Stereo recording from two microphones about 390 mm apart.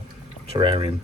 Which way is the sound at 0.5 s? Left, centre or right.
Centre.